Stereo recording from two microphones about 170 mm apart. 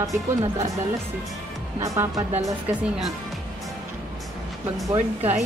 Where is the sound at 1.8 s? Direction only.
20° right (ahead or behind).